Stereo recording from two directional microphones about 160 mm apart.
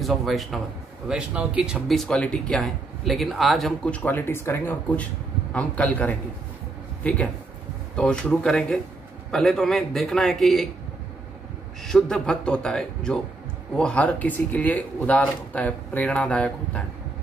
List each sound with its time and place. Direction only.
0.0 s a man's voice: centre (ahead or behind)
11.8 s speech: 5° left (ahead or behind)